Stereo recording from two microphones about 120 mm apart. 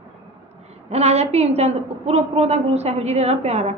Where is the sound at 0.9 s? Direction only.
60° right (ahead or behind).